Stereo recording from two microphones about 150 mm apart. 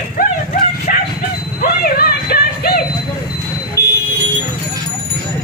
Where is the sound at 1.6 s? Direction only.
90° left.